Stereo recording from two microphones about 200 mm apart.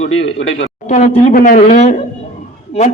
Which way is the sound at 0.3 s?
75° left (ahead or behind).